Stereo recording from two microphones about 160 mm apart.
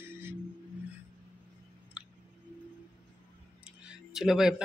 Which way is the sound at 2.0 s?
5° right (ahead or behind).